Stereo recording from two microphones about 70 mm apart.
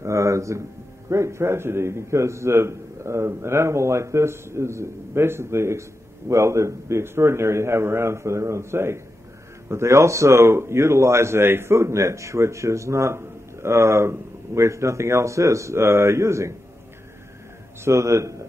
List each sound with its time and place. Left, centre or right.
0.0 s a sound: right
1.1 s a man's voice: right
17.8 s speech: right